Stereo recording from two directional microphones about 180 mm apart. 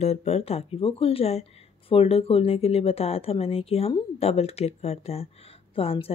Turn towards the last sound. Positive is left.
turn(degrees=30)  # may be behind; listen again after turning